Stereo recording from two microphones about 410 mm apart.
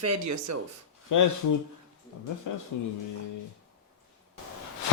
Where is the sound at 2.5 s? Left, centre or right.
Left.